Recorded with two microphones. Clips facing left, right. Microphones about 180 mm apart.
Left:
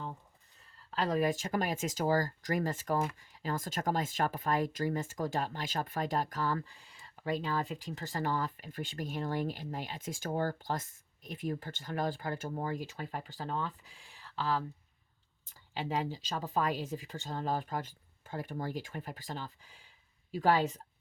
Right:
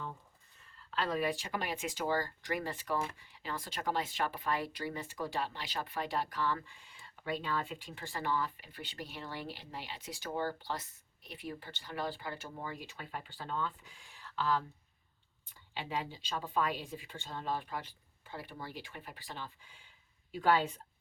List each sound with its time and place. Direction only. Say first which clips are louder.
0.8 s speech: left 4 dB; 40° left (ahead or behind)